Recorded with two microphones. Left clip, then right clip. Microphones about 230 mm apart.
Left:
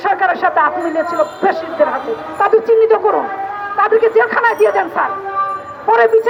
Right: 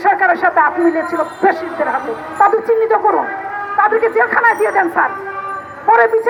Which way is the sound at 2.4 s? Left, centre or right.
Left.